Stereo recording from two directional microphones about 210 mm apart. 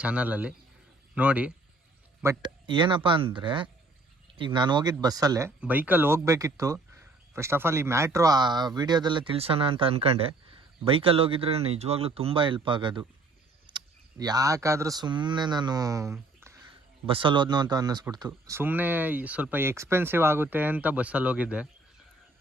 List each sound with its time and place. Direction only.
0.0 s a man's voice: 5° right (ahead or behind)
2.4 s speech: 25° right (ahead or behind)
16.1 s a sound: 10° right (ahead or behind)
17.1 s speech: 25° right (ahead or behind); by 21.7 s 5° right (ahead or behind)